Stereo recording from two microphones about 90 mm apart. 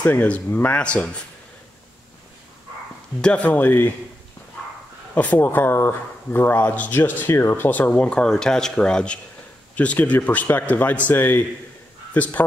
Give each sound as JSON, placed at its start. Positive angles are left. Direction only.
{"t": 0.0, "sound": "speech", "side_deg": 15}
{"t": 3.2, "sound": "speech", "side_deg": 15}
{"t": 5.1, "sound": "speech", "side_deg": 15}
{"t": 7.0, "sound": "a man's voice", "side_deg": 30}